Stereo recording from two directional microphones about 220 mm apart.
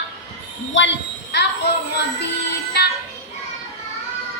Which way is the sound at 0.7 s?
55° left (ahead or behind).